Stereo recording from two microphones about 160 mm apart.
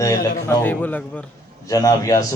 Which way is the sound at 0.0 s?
15° left (ahead or behind).